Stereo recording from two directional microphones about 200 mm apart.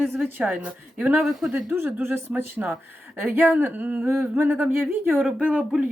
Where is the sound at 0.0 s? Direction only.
10° right (ahead or behind).